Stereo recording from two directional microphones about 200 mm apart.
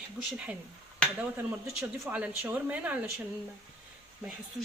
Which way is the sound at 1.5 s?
10° right (ahead or behind).